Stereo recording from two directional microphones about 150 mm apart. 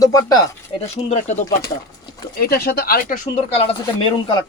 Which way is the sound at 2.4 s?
90° left.